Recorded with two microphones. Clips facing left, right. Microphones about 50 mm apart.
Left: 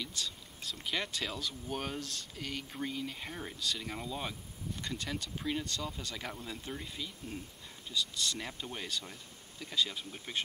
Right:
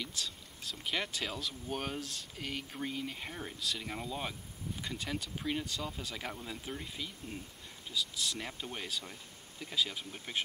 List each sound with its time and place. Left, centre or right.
0.1 s speech: centre